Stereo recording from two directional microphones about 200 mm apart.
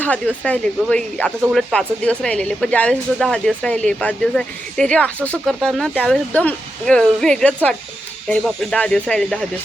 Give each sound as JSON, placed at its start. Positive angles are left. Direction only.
{"t": 0.0, "sound": "speech", "side_deg": 5}